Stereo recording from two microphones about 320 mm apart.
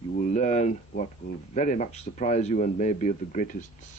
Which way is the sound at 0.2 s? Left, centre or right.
Left.